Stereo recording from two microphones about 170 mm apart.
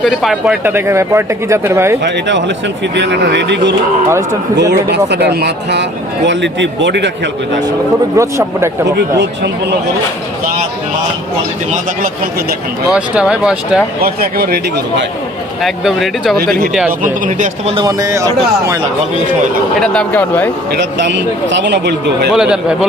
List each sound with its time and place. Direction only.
0.0 s speech: centre (ahead or behind)
2.0 s speech: 90° right
8.1 s speech: 15° right (ahead or behind)
11.7 s speech: 55° right (ahead or behind)
12.9 s speech: 5° right (ahead or behind)
14.0 s a man's voice: 65° right (ahead or behind)
15.6 s speech: centre (ahead or behind)
17.0 s speech: 50° right (ahead or behind)
17.7 s speech: 20° right (ahead or behind)
19.8 s speech: 5° left (ahead or behind)
20.7 s speech: 90° right
22.3 s speech: 5° right (ahead or behind)